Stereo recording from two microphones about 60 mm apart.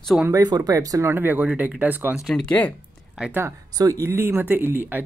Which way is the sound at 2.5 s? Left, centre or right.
Left.